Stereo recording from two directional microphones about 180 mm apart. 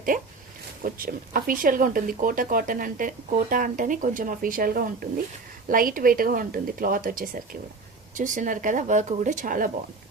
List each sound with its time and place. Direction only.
0.1 s speech: 50° right (ahead or behind)